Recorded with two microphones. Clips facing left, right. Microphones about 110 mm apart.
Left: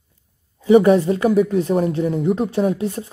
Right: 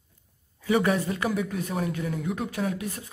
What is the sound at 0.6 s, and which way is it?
Speech, 30° left (ahead or behind).